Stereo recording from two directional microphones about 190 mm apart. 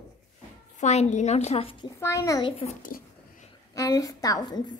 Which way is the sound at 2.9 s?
45° left (ahead or behind).